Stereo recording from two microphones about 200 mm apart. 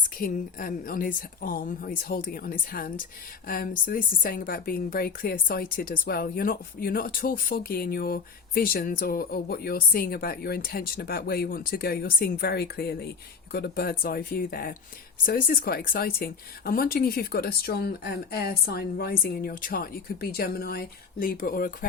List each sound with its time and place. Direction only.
0.2 s speech: 45° left (ahead or behind)